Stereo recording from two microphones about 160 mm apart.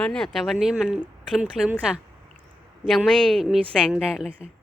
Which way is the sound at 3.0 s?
5° right (ahead or behind).